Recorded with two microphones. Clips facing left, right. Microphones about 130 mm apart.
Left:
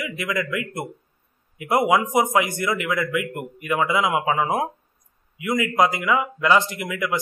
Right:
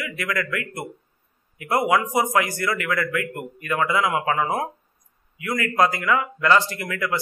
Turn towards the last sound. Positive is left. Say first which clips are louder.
# left 1 dB
turn(degrees=15)  # may be behind; listen again after turning